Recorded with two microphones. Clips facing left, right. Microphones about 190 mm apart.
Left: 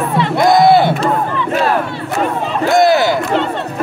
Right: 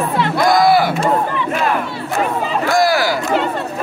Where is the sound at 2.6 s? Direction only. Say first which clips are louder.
Left 5 dB; 20° left (ahead or behind).